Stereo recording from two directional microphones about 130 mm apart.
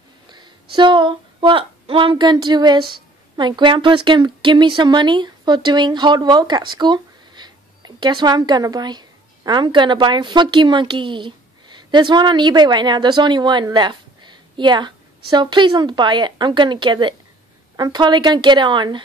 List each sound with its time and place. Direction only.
0.3 s a woman's voice: 35° right (ahead or behind)